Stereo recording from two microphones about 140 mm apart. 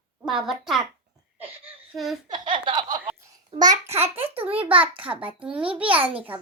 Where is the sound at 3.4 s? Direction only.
30° right (ahead or behind).